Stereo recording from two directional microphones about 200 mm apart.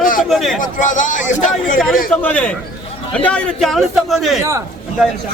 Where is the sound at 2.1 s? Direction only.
5° left (ahead or behind).